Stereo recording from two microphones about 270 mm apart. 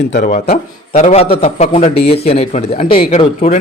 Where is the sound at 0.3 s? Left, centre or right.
Left.